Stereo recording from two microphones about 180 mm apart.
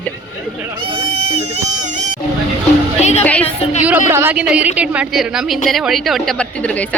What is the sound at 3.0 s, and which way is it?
Speech, 40° left (ahead or behind).